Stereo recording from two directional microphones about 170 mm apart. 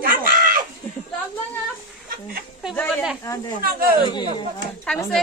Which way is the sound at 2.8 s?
10° left (ahead or behind).